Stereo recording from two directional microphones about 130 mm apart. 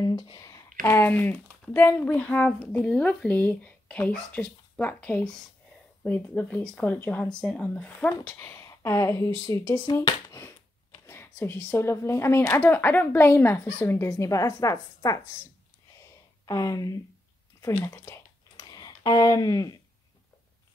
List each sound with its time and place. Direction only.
0.0 s a sound: 35° left (ahead or behind)
0.8 s speech: 15° left (ahead or behind)
16.4 s speech: 25° left (ahead or behind)
17.6 s computer keyboard: 25° left (ahead or behind)